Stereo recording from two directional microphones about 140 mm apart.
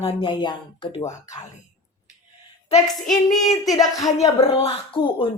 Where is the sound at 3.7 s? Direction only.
25° left (ahead or behind).